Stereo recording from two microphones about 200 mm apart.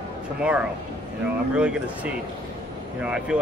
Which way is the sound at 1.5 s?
5° right (ahead or behind).